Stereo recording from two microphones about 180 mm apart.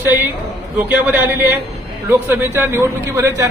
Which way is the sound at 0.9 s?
10° right (ahead or behind).